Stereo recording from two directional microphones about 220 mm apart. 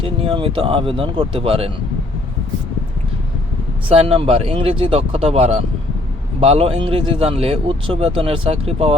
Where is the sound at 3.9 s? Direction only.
25° right (ahead or behind).